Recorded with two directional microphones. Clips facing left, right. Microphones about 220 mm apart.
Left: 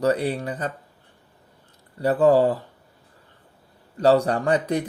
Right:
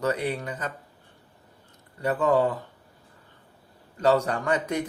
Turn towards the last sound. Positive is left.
turn(degrees=35)  # may be behind; listen again after turning